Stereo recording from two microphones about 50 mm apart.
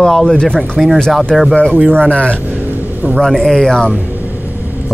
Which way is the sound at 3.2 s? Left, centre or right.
Centre.